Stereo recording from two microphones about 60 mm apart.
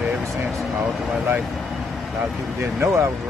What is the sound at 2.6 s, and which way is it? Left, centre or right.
Speech, right.